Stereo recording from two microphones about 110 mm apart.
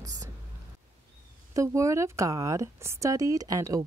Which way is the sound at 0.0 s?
35° right (ahead or behind).